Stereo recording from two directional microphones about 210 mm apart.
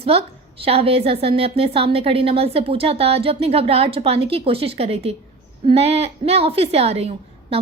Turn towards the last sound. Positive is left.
turn(degrees=-30)  # may be behind; listen again after turning